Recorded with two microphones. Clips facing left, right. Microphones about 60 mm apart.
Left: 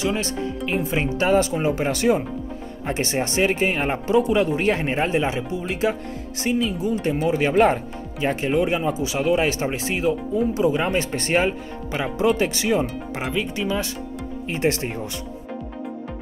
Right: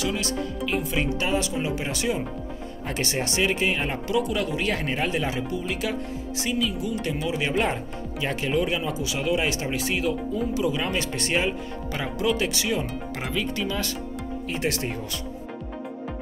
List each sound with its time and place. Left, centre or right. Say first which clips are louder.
0.0 s speech: left 3 dB; left
2.9 s speech: left 4 dB; left
6.5 s speech: left 5 dB; left
11.9 s speech: left 6 dB; centre
12.4 s speech: left 5 dB; left
13.3 s speech: left 3 dB; centre